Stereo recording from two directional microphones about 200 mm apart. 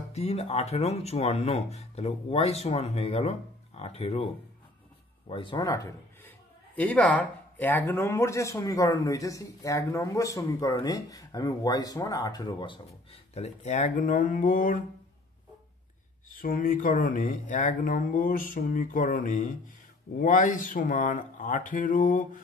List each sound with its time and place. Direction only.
0.1 s speech: 30° left (ahead or behind)
5.3 s a man's voice: 25° left (ahead or behind)
13.3 s speech: 35° left (ahead or behind)
16.3 s speech: 45° left (ahead or behind)